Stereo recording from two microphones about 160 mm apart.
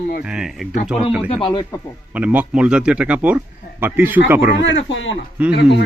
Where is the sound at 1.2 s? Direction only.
35° left (ahead or behind).